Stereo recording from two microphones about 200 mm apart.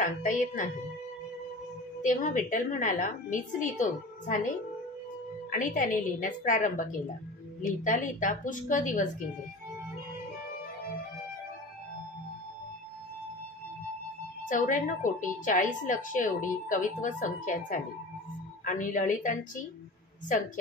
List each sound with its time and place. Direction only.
0.0 s a woman's voice: 40° left (ahead or behind)
2.0 s a woman's voice: 40° left (ahead or behind)
5.5 s a woman's voice: 40° left (ahead or behind)
14.5 s a woman's voice: 40° left (ahead or behind)